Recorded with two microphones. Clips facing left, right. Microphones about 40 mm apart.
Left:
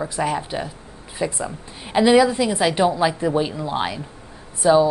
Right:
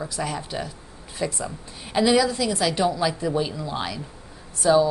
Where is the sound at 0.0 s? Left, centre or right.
Left.